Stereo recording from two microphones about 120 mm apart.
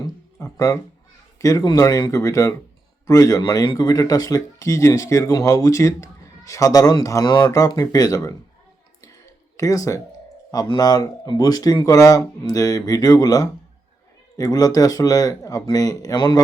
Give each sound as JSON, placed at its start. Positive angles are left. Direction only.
{"t": 0.0, "sound": "a sound", "side_deg": 25}
{"t": 1.4, "sound": "speech", "side_deg": 30}
{"t": 9.6, "sound": "speech", "side_deg": 25}